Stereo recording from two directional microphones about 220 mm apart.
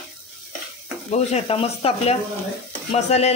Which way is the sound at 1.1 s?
30° left (ahead or behind).